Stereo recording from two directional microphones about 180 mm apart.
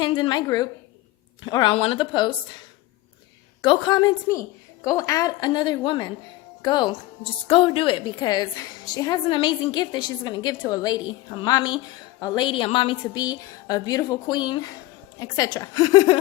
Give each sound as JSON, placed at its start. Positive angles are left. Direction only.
{"t": 0.0, "sound": "a woman's voice", "side_deg": 25}
{"t": 3.6, "sound": "a woman's voice", "side_deg": 25}